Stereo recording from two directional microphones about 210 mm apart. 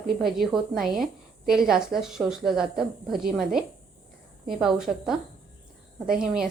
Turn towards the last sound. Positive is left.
turn(degrees=-5)  # may be behind; listen again after turning